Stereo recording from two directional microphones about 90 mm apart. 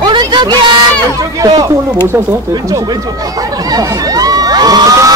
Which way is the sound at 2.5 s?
45° right (ahead or behind).